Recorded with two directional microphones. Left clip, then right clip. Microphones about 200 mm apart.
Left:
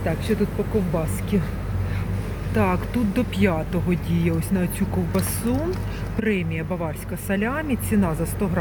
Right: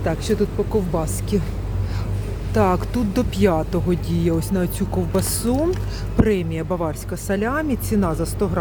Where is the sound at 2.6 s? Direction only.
25° right (ahead or behind).